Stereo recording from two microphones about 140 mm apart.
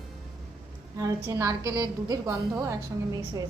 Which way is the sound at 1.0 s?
25° right (ahead or behind).